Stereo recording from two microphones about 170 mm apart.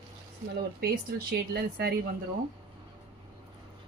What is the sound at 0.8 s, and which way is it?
Speech, 60° right (ahead or behind).